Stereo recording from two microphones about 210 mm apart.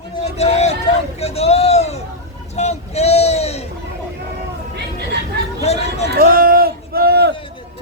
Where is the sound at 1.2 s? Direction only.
30° left (ahead or behind).